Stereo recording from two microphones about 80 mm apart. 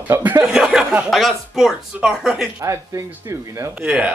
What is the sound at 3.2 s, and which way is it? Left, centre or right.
Speech, right.